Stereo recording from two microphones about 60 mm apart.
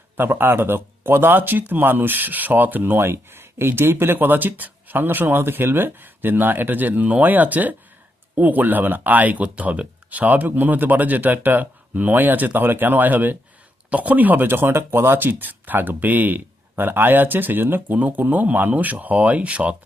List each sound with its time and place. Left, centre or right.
0.2 s speech: right
14.4 s speech: right